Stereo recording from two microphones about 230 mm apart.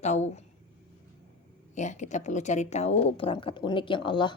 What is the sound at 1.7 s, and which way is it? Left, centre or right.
Speech, left.